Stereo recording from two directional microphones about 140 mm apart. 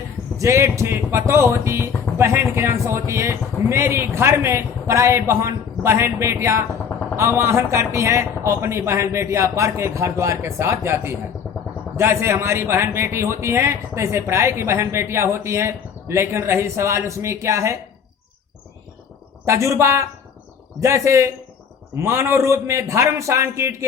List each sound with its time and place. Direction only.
0.3 s a man's voice: 20° right (ahead or behind)
11.4 s vehicle: 5° left (ahead or behind)
11.9 s a man's voice: 20° right (ahead or behind)
19.5 s a man's voice: 20° right (ahead or behind)